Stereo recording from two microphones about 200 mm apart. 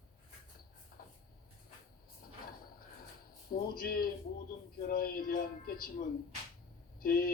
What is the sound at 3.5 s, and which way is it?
Speech, 45° left (ahead or behind).